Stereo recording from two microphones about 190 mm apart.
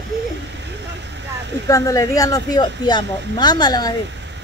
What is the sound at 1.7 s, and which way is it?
Speech, 20° left (ahead or behind).